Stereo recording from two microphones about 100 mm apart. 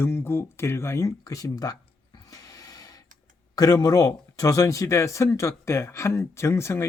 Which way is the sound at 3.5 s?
40° left (ahead or behind).